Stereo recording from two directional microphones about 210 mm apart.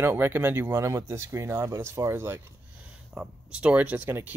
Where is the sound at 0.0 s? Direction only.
10° right (ahead or behind).